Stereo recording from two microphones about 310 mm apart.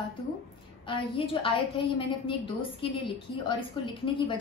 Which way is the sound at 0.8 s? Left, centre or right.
Centre.